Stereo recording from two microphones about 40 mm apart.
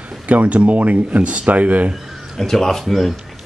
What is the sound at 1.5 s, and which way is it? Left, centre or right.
Speech, right.